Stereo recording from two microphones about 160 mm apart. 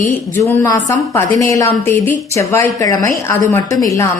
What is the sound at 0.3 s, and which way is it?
A woman's voice, 15° left (ahead or behind).